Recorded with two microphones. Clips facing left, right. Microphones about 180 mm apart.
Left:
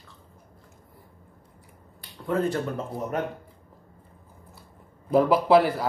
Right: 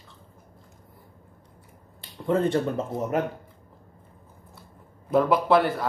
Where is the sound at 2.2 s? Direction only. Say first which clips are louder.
Right 3 dB; 25° right (ahead or behind).